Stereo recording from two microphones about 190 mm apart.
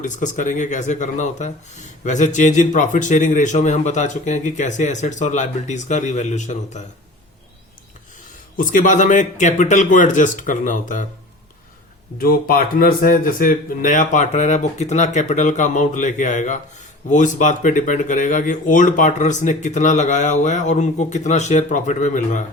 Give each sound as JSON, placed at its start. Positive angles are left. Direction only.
{"t": 0.0, "sound": "speech", "side_deg": 40}
{"t": 8.5, "sound": "speech", "side_deg": 45}
{"t": 12.2, "sound": "speech", "side_deg": 50}